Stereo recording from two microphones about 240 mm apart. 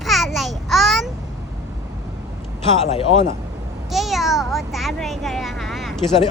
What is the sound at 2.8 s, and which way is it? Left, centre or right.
Speech, left.